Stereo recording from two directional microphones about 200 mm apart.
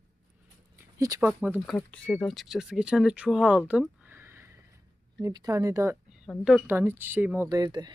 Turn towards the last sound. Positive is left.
turn(degrees=-20)  # may be behind; listen again after turning